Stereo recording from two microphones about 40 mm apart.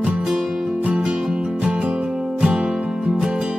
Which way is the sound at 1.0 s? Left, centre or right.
Right.